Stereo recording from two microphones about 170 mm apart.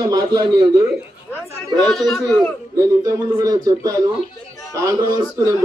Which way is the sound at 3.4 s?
20° right (ahead or behind).